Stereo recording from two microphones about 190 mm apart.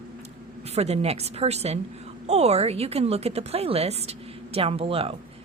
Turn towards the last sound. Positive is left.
turn(degrees=-30)  # may be behind; listen again after turning